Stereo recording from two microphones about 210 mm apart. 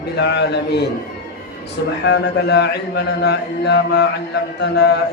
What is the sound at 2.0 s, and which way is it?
A man's voice, 55° left (ahead or behind).